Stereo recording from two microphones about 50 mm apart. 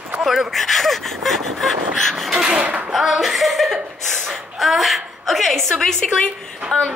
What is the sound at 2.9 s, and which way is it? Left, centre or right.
Speech, centre.